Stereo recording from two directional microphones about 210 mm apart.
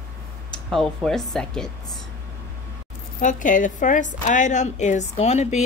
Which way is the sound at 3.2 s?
35° left (ahead or behind).